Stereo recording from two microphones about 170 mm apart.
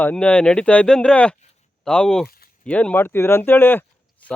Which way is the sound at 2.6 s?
5° left (ahead or behind).